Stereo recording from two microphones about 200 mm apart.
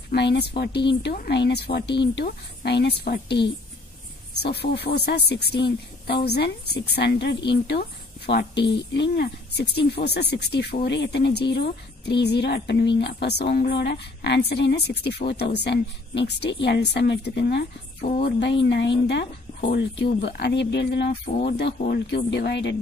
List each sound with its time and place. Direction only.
0.1 s speech: 55° left (ahead or behind)
20.2 s speech: 55° left (ahead or behind)